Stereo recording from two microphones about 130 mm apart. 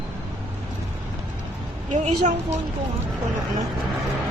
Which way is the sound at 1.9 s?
55° right (ahead or behind).